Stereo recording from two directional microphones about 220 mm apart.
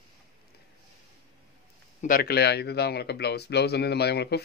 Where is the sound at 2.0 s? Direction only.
40° left (ahead or behind).